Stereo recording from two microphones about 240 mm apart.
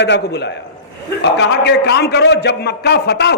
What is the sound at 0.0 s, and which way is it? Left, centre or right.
A man's voice, left.